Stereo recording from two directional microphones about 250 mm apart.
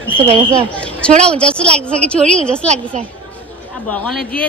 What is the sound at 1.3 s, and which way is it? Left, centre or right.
A woman's voice, centre.